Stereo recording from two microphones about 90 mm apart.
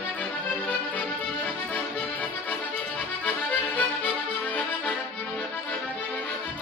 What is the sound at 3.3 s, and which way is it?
Accordion, 20° left (ahead or behind).